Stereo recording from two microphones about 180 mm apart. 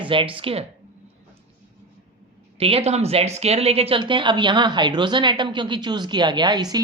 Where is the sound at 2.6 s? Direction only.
35° right (ahead or behind).